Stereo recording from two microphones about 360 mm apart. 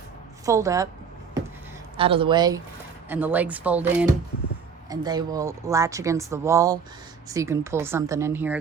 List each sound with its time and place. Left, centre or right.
0.4 s speech: centre
2.0 s speech: centre